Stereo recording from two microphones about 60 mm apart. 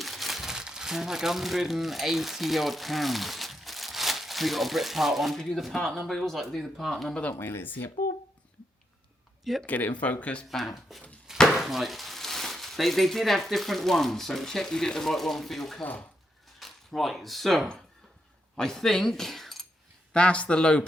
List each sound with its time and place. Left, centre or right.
0.0 s speech: centre
7.3 s speech: left
9.4 s speech: centre
9.6 s speech: left
10.9 s speech: centre
11.3 s chop: centre
11.6 s speech: centre
15.8 s speech: left
16.6 s speech: centre
20.1 s speech: centre